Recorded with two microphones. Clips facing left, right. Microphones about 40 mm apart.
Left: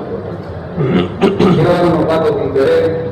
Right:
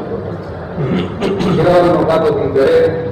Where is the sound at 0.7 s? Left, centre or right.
Centre.